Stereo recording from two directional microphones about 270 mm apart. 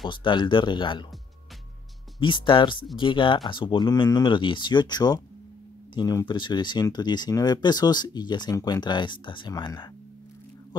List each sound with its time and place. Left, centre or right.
0.1 s speech: centre
2.1 s speech: centre